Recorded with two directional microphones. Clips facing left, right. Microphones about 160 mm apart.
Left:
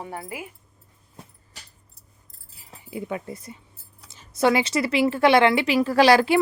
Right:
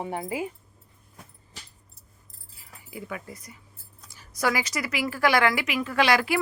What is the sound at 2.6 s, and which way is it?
Speech, 25° left (ahead or behind).